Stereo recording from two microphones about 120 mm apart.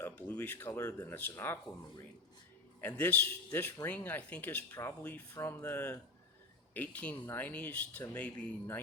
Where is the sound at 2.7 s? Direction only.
15° left (ahead or behind).